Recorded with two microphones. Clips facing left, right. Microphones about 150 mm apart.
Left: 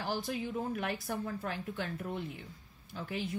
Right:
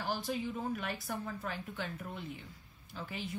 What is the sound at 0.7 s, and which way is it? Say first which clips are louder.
A woman's voice: left 3 dB; 50° left (ahead or behind).